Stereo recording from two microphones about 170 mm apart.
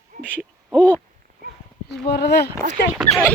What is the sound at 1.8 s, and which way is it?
Speech, 80° left.